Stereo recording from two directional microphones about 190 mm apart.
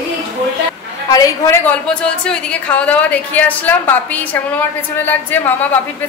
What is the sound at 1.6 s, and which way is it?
A woman's voice, 5° left (ahead or behind).